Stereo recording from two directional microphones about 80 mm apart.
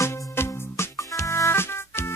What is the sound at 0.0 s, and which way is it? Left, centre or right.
Music, left.